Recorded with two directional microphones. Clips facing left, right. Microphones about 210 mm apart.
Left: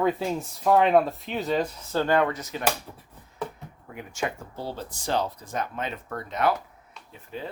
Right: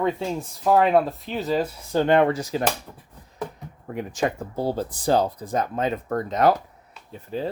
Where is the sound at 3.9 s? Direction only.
35° right (ahead or behind).